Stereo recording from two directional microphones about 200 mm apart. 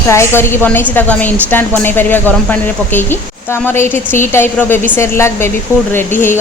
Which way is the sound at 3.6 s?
10° left (ahead or behind).